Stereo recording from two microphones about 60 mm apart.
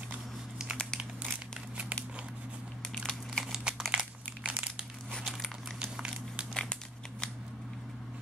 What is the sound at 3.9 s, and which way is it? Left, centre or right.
Crumpling, centre.